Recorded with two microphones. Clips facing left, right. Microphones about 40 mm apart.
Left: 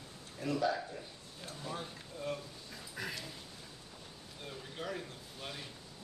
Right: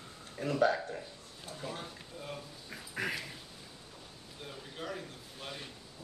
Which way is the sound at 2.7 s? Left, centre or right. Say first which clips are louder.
Right 6 dB; right.